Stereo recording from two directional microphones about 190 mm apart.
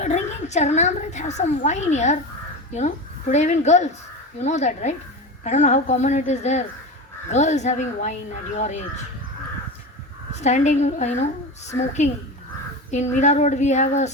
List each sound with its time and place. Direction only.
0.0 s a woman's voice: 40° left (ahead or behind)
10.3 s a woman's voice: 35° left (ahead or behind)